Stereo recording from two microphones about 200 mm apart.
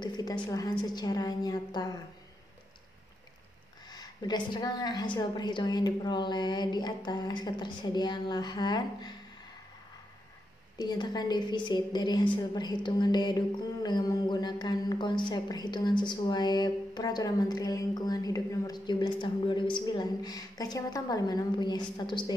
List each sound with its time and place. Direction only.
0.0 s a woman's voice: 20° left (ahead or behind)
3.9 s a woman's voice: 20° left (ahead or behind)
10.8 s a woman's voice: 20° left (ahead or behind)